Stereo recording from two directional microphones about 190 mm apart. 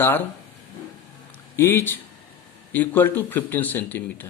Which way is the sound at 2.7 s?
10° left (ahead or behind).